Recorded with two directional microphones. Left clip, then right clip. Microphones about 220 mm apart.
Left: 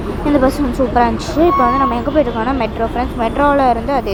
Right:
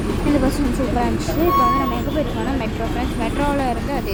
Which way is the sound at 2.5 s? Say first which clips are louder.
Left 6 dB; 15° left (ahead or behind).